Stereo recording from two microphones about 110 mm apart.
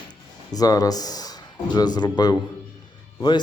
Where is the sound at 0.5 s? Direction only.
35° left (ahead or behind).